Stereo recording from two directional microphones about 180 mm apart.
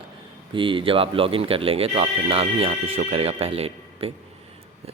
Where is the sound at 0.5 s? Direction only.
30° right (ahead or behind).